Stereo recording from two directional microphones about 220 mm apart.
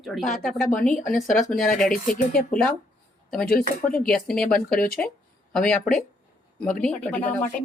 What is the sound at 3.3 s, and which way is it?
Speech, 5° left (ahead or behind).